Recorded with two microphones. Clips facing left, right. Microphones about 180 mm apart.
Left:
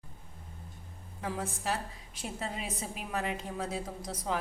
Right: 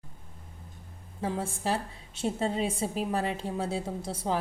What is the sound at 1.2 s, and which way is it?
A woman's voice, 30° right (ahead or behind).